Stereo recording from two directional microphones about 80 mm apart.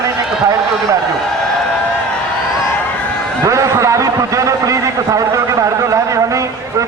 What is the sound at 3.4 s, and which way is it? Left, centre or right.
A man's voice, right.